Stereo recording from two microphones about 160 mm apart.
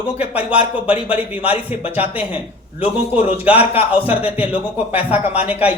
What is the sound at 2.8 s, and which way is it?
Speech, 35° left (ahead or behind).